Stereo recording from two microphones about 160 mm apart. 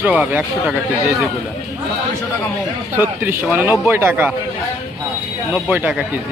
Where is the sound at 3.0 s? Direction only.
15° right (ahead or behind).